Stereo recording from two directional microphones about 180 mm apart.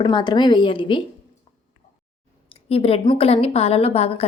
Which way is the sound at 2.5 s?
30° left (ahead or behind).